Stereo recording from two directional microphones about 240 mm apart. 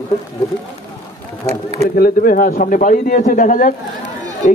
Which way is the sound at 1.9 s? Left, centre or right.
Left.